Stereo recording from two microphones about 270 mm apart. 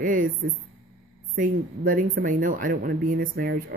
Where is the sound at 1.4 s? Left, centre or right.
Right.